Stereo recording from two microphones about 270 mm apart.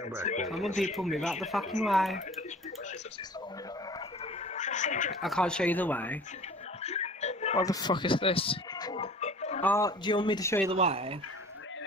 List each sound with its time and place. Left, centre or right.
0.2 s a man's voice: left
0.9 s speech: centre
4.6 s a sound: left
5.2 s speech: centre
6.8 s a sound: left
7.6 s music: centre
9.6 s speech: centre
10.7 s speech: right